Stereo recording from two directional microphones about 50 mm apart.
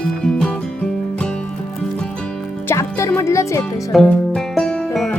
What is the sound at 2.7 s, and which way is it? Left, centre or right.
Music, left.